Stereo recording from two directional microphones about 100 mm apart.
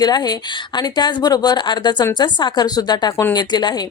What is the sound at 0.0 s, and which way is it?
Speech, 40° left (ahead or behind).